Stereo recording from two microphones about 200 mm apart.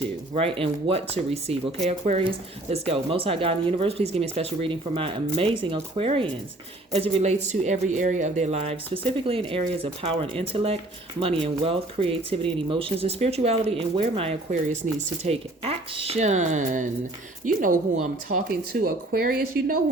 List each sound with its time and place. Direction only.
0.3 s speech: 25° right (ahead or behind)
18.9 s speech: 45° right (ahead or behind)